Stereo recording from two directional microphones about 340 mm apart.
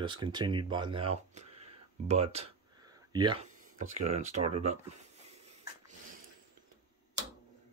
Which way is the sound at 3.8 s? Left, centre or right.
Right.